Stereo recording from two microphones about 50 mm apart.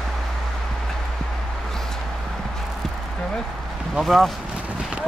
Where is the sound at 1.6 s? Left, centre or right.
Centre.